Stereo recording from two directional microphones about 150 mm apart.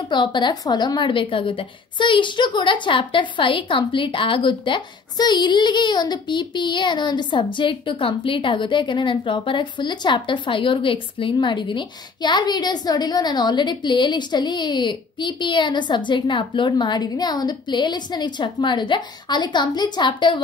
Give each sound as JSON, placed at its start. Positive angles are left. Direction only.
{"t": 0.1, "sound": "a woman's voice", "side_deg": 30}